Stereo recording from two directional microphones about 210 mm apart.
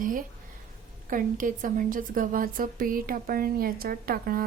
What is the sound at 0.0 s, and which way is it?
A woman's voice, 40° right (ahead or behind).